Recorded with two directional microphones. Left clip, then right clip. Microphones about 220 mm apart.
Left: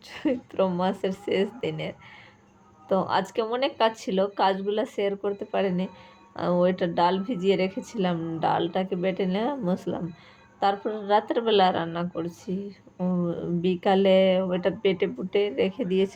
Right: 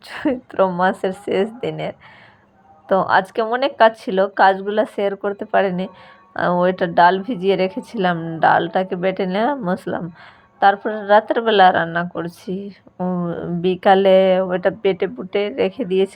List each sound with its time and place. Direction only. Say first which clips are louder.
0.1 s speech: right 6 dB; 15° right (ahead or behind)